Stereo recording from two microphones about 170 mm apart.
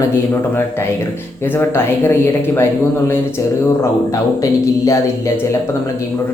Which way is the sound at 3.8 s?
20° left (ahead or behind).